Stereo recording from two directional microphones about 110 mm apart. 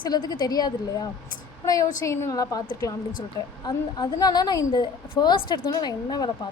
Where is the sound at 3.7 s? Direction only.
40° left (ahead or behind).